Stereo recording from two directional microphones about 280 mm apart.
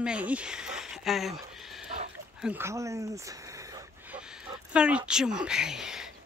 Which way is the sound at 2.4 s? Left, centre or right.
Centre.